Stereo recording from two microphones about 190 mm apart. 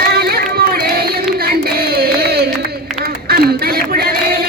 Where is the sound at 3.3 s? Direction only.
55° right (ahead or behind).